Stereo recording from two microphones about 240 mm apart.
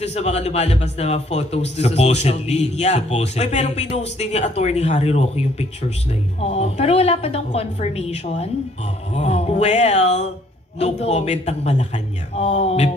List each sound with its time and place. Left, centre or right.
0.0 s a man's voice: left